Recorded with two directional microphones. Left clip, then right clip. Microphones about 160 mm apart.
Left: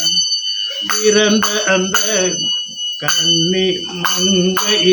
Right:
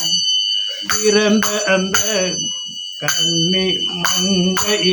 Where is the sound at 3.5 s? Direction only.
15° right (ahead or behind).